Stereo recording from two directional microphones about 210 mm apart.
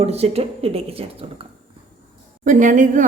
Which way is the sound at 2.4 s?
40° right (ahead or behind).